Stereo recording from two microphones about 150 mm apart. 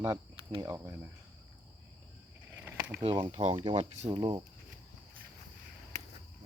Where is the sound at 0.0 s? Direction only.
30° right (ahead or behind).